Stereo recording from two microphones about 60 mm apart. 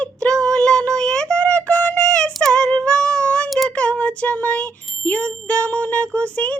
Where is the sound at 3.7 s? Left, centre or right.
Left.